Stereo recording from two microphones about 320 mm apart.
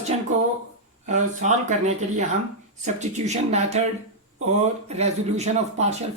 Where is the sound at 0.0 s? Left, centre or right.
Right.